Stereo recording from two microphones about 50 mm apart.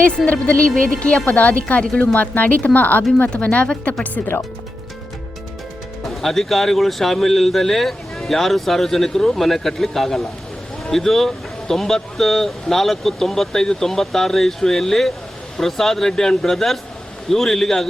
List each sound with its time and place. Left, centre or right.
0.3 s speech: left
3.2 s speech: left
6.2 s speech: centre